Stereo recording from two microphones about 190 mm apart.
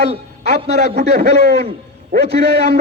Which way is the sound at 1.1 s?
60° right (ahead or behind).